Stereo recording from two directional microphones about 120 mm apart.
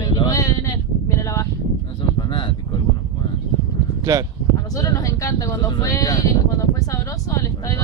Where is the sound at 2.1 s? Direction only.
40° left (ahead or behind).